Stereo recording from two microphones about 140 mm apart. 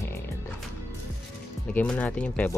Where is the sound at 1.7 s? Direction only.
10° left (ahead or behind).